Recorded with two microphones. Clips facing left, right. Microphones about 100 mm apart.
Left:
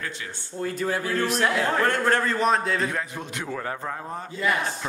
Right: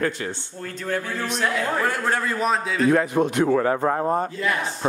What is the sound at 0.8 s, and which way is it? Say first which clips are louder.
A man's voice: even; 5° left (ahead or behind).